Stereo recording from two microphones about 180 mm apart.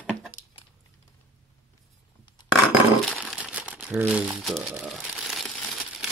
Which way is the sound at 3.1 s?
5° left (ahead or behind).